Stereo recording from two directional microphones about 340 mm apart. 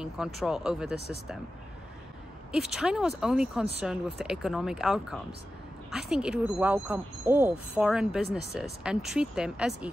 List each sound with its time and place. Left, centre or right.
0.0 s speech: centre
0.9 s speech: right
2.5 s speech: centre